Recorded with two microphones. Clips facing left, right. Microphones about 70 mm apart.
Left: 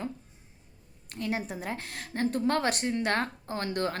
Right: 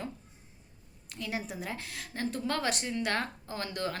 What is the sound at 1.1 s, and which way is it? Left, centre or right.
A woman's voice, left.